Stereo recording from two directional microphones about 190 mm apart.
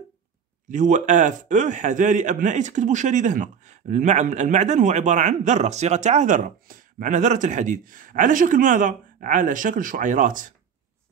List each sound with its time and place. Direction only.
0.7 s a man's voice: 40° right (ahead or behind)